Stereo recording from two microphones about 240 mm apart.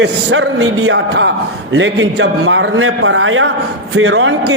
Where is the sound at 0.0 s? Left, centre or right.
Right.